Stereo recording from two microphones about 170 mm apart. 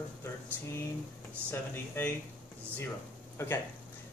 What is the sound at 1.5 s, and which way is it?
Speech, 10° left (ahead or behind).